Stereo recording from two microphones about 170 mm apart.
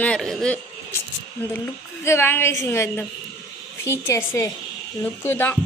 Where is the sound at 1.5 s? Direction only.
15° left (ahead or behind).